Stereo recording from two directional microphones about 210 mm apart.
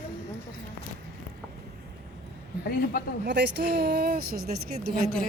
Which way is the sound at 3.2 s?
55° right (ahead or behind).